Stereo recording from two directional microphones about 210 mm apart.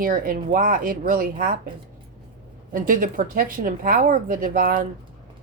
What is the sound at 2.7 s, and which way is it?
A woman's voice, 40° right (ahead or behind).